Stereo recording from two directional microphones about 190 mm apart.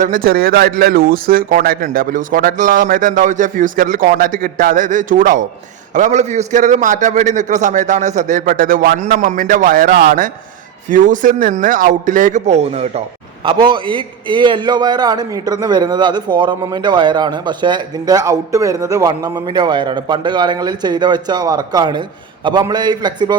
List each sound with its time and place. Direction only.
0.0 s a man's voice: 50° right (ahead or behind); by 23.4 s 20° right (ahead or behind)